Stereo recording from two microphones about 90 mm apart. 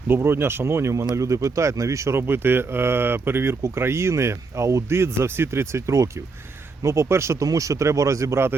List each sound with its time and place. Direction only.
0.1 s speech: 25° right (ahead or behind)